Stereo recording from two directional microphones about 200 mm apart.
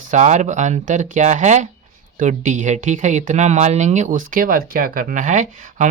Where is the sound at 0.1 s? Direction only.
35° right (ahead or behind).